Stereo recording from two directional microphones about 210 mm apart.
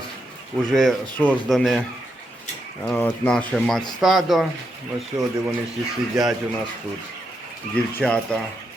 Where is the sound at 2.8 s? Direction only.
5° left (ahead or behind).